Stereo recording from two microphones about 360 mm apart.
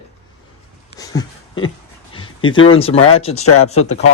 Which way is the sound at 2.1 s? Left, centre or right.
Centre.